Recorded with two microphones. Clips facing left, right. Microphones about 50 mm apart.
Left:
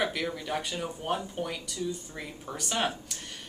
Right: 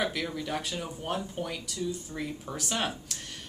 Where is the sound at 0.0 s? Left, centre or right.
Centre.